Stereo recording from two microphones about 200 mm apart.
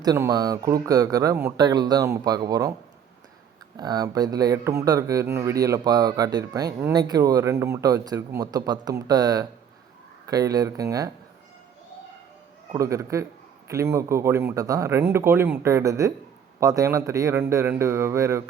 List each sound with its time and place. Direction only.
0.0 s speech: 15° right (ahead or behind)
3.8 s speech: 20° right (ahead or behind)
12.7 s speech: 15° right (ahead or behind)